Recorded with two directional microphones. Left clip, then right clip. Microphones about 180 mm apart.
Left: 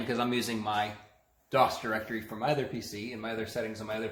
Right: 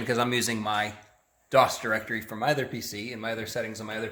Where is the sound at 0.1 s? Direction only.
65° right (ahead or behind).